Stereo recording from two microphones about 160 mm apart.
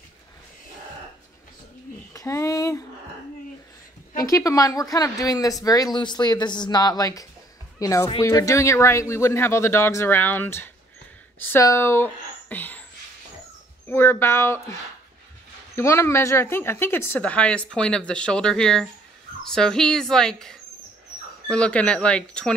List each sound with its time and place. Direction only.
2.1 s a sound: 20° left (ahead or behind)
4.2 s a woman's voice: 20° left (ahead or behind)
13.8 s a woman's voice: 15° left (ahead or behind)